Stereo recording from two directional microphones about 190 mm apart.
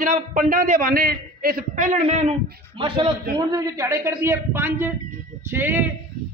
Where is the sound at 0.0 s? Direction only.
45° right (ahead or behind).